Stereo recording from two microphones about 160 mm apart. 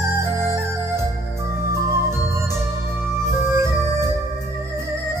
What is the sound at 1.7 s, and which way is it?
Music, 15° right (ahead or behind).